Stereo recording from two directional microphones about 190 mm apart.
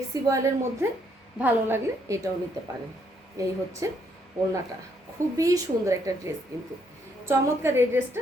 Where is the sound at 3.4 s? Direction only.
15° right (ahead or behind).